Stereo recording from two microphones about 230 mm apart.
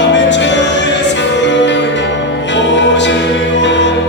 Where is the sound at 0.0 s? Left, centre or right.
Left.